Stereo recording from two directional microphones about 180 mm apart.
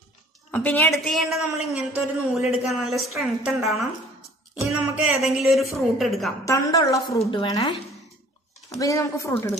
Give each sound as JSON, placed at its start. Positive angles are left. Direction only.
{"t": 0.5, "sound": "a woman's voice", "side_deg": 10}
{"t": 6.4, "sound": "a woman's voice", "side_deg": 15}